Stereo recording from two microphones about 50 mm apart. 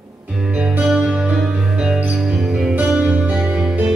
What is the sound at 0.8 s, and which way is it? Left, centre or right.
Music, centre.